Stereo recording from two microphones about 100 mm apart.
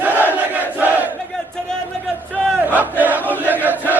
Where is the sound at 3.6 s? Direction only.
15° right (ahead or behind).